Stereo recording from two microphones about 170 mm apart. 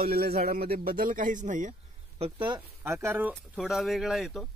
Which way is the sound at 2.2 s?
30° right (ahead or behind).